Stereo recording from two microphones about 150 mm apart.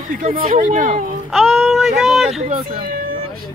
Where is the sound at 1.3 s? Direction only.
Centre (ahead or behind).